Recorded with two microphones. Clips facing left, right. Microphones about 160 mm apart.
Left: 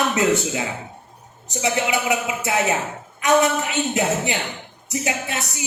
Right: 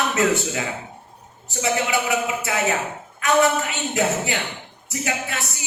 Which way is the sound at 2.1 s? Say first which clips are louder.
Left 1 dB; 20° left (ahead or behind).